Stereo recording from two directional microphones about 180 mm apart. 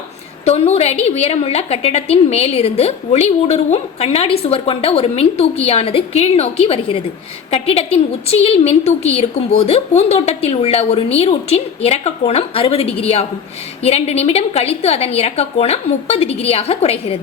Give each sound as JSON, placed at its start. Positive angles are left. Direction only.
{"t": 0.4, "sound": "a woman's voice", "side_deg": 35}